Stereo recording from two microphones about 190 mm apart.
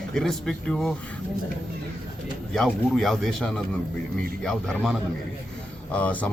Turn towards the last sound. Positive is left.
turn(degrees=5)  # may be behind; listen again after turning